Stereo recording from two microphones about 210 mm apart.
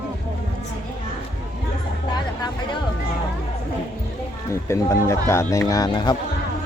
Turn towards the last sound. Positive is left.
turn(degrees=20)  # may be behind; listen again after turning